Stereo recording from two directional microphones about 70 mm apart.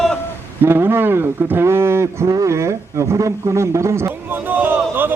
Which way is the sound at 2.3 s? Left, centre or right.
Right.